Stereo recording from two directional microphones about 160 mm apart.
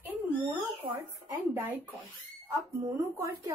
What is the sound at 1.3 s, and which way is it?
Speech, 15° right (ahead or behind).